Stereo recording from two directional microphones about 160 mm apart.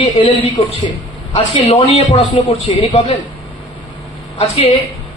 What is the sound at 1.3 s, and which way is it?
Speech, 40° left (ahead or behind).